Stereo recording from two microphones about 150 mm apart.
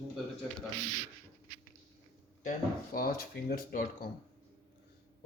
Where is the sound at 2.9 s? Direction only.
85° left.